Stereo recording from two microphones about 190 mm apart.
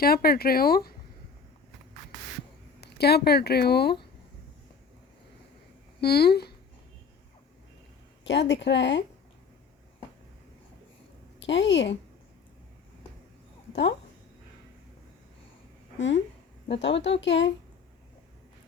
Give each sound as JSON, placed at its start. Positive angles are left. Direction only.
{"t": 0.0, "sound": "speech", "side_deg": 55}
{"t": 2.8, "sound": "speech", "side_deg": 60}
{"t": 6.0, "sound": "speech", "side_deg": 55}
{"t": 8.2, "sound": "speech", "side_deg": 65}
{"t": 11.3, "sound": "a woman's voice", "side_deg": 70}
{"t": 16.0, "sound": "speech", "side_deg": 75}